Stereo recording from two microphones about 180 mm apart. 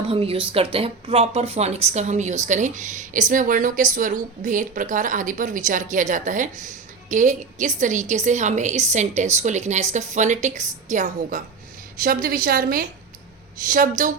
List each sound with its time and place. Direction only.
0.1 s a woman's voice: 30° right (ahead or behind); by 14.1 s 50° right (ahead or behind)